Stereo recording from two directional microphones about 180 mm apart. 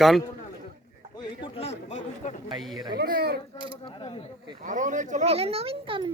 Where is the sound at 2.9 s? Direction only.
60° right (ahead or behind).